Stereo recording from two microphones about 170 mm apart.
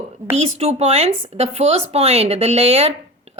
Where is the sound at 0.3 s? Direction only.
40° right (ahead or behind).